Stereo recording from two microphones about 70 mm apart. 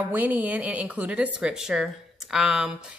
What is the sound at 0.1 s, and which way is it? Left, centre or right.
A woman's voice, right.